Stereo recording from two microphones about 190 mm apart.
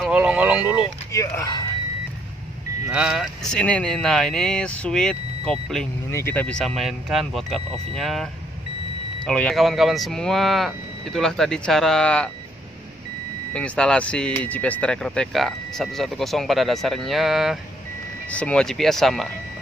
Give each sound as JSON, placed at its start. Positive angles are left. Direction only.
{"t": 0.0, "sound": "speech", "side_deg": -5}
{"t": 1.1, "sound": "speech", "side_deg": 15}
{"t": 2.9, "sound": "speech", "side_deg": -5}
{"t": 13.5, "sound": "speech", "side_deg": 5}